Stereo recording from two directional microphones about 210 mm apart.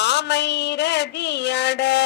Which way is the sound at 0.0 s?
55° left (ahead or behind).